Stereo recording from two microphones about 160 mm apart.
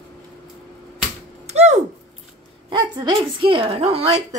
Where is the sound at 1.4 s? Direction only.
45° right (ahead or behind).